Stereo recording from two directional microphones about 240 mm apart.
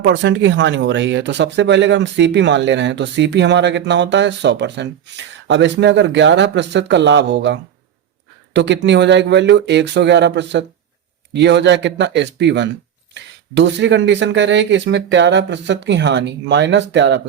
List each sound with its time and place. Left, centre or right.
0.0 s speech: right